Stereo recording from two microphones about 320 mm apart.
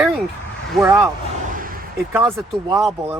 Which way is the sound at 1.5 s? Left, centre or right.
Right.